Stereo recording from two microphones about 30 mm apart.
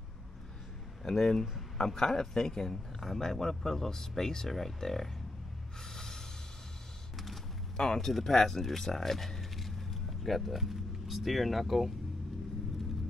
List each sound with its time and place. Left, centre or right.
1.0 s a man's voice: centre
5.9 s snort: centre
7.7 s speech: centre